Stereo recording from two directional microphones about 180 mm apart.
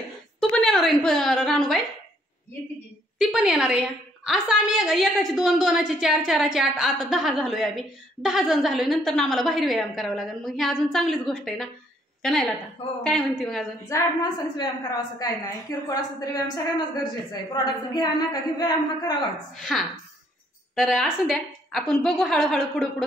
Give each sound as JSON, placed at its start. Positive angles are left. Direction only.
{"t": 0.4, "sound": "a sound", "side_deg": 5}
{"t": 3.2, "sound": "a woman's voice", "side_deg": 0}
{"t": 13.9, "sound": "a woman's voice", "side_deg": 15}
{"t": 19.5, "sound": "a woman's voice", "side_deg": 0}